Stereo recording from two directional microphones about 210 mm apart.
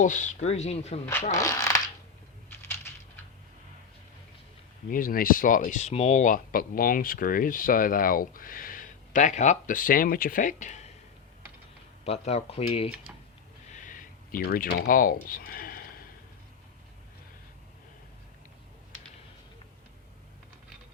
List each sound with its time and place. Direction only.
0.0 s speech: 35° left (ahead or behind)
1.3 s speech: 15° left (ahead or behind)
2.6 s a sound: 10° left (ahead or behind)
4.9 s speech: 40° left (ahead or behind)
12.0 s speech: 30° left (ahead or behind)
13.7 s a sound: 40° left (ahead or behind)